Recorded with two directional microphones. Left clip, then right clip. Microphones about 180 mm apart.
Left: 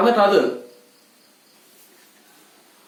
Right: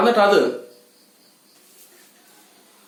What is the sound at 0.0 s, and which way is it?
Speech, 20° right (ahead or behind).